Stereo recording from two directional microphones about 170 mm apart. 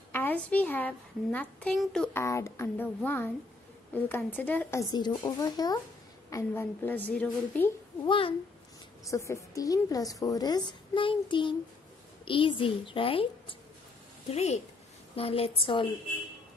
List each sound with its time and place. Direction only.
0.1 s a woman's voice: 10° left (ahead or behind)
2.1 s a woman's voice: 15° left (ahead or behind)
8.0 s a child's voice: 30° left (ahead or behind)
9.1 s a woman's voice: 20° left (ahead or behind)